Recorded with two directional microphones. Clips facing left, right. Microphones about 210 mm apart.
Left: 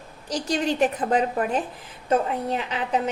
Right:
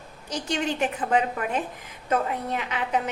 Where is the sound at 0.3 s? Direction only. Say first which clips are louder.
Left 3 dB; 35° left (ahead or behind).